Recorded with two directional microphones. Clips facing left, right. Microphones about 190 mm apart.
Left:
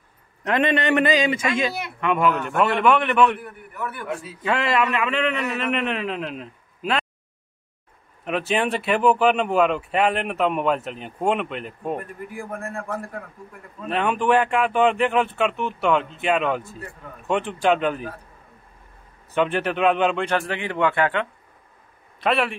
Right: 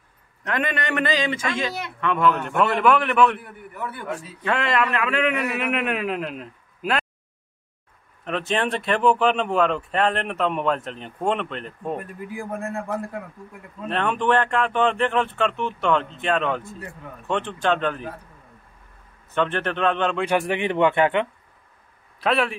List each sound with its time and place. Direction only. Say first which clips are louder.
0.4 s a man's voice: left 5 dB; 25° left (ahead or behind)
2.4 s speech: even; centre (ahead or behind)
3.3 s a man's voice: left 1 dB; 25° right (ahead or behind)
4.4 s speech: left 1 dB; centre (ahead or behind)
8.3 s speech: left 1 dB; 5° left (ahead or behind)
12.5 s a man's voice: right 3 dB; 20° right (ahead or behind)
13.8 s a man's voice: left 1 dB; 5° left (ahead or behind)
19.3 s a man's voice: left 2 dB; 10° left (ahead or behind)
20.2 s a man's voice: right 2 dB; 10° right (ahead or behind)
22.2 s speech: even; centre (ahead or behind)